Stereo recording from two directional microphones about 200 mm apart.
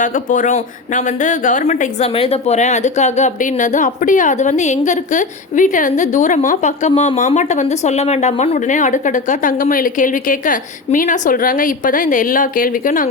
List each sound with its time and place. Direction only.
0.0 s speech: 40° left (ahead or behind)